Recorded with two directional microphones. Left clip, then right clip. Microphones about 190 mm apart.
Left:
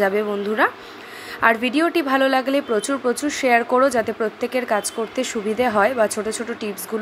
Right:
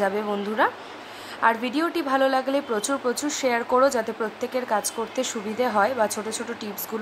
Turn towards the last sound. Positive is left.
turn(degrees=10)  # may be behind; listen again after turning